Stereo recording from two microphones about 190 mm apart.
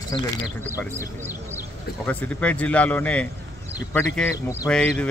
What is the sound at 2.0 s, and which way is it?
Speech, 5° left (ahead or behind).